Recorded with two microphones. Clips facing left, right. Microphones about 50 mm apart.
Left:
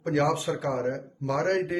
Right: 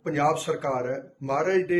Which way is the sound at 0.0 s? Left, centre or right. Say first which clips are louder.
Right 1 dB; right.